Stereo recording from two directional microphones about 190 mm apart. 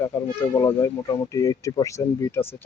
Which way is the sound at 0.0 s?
15° left (ahead or behind).